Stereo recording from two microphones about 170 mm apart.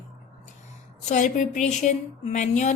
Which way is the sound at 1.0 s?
45° left (ahead or behind).